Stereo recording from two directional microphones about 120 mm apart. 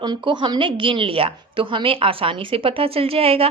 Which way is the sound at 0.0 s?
40° right (ahead or behind).